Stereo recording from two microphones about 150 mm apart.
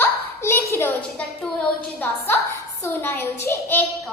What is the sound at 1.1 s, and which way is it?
Speech, 5° left (ahead or behind).